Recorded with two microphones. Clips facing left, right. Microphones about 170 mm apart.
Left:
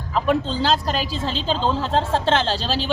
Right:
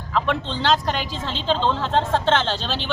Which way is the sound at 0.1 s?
40° left (ahead or behind).